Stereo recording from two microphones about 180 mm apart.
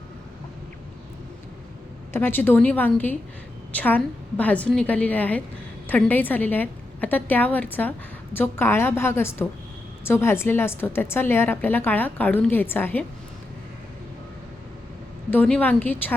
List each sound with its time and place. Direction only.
2.1 s a woman's voice: 10° left (ahead or behind)
15.3 s a woman's voice: 5° left (ahead or behind)